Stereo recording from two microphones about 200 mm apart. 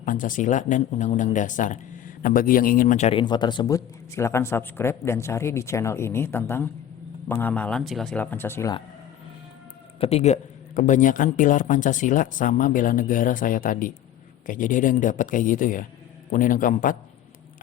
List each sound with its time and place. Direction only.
0.0 s speech: 40° left (ahead or behind); by 8.7 s 10° left (ahead or behind)
10.0 s speech: 30° left (ahead or behind)